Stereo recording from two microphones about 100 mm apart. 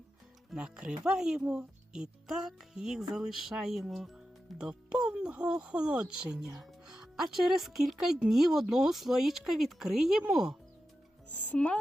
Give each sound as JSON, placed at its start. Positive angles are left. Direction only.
{"t": 0.5, "sound": "speech", "side_deg": -10}
{"t": 11.3, "sound": "speech", "side_deg": 15}